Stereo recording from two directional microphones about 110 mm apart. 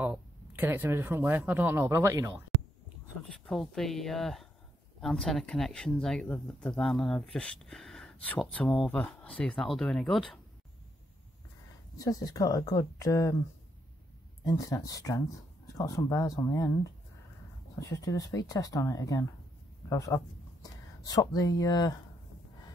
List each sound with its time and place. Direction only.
0.5 s speech: 20° right (ahead or behind)
3.3 s speech: 5° left (ahead or behind)
12.0 s speech: 35° left (ahead or behind)
14.4 s speech: 35° left (ahead or behind)